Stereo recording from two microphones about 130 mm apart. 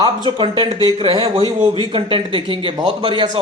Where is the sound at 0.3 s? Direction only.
40° right (ahead or behind).